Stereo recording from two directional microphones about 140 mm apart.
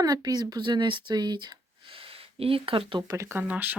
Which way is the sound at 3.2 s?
15° right (ahead or behind).